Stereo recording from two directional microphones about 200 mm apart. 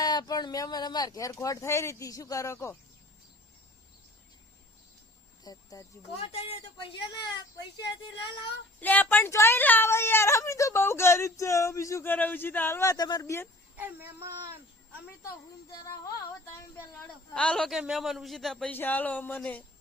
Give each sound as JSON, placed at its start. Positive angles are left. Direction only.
{"t": 0.0, "sound": "speech", "side_deg": 20}
{"t": 5.4, "sound": "speech", "side_deg": 20}
{"t": 8.8, "sound": "speech", "side_deg": 10}
{"t": 13.7, "sound": "speech", "side_deg": -10}
{"t": 15.7, "sound": "speech", "side_deg": 20}
{"t": 17.3, "sound": "a man's voice", "side_deg": 5}